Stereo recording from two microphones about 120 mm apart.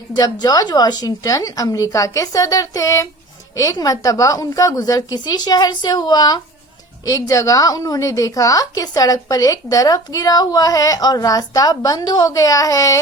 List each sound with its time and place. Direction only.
0.2 s a woman's voice: 30° left (ahead or behind)